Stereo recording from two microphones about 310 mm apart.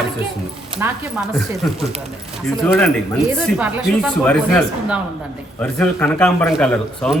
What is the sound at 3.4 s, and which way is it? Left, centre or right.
A man's voice, centre.